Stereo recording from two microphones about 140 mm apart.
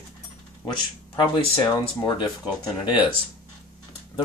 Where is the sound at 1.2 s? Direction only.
40° left (ahead or behind).